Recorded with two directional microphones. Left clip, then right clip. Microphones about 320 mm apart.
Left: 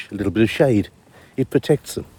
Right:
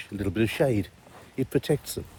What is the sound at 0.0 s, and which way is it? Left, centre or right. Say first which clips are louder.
Speech: left 8 dB; left.